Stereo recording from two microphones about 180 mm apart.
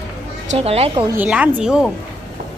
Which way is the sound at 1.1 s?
10° right (ahead or behind).